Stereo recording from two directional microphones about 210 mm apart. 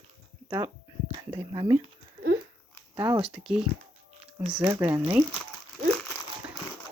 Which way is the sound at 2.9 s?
10° right (ahead or behind).